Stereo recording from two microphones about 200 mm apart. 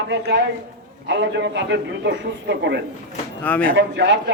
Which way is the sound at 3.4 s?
10° left (ahead or behind).